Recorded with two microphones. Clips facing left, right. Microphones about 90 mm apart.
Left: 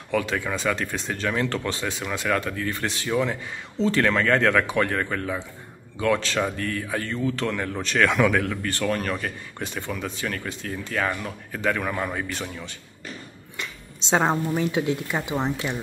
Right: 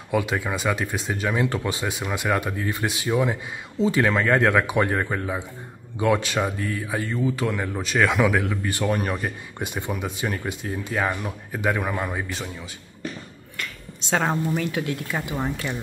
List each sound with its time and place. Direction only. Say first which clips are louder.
0.1 s speech: right 1 dB; 10° right (ahead or behind)
13.6 s a woman's voice: right 1 dB; 20° left (ahead or behind)